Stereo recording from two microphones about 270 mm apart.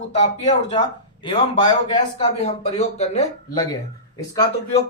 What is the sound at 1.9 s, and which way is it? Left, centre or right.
Speech, left.